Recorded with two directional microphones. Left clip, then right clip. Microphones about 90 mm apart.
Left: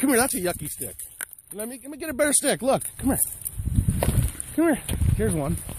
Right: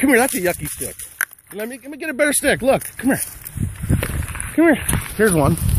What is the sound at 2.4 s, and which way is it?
Speech, 30° left (ahead or behind).